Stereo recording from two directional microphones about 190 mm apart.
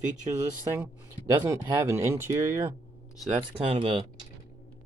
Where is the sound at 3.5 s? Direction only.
30° right (ahead or behind).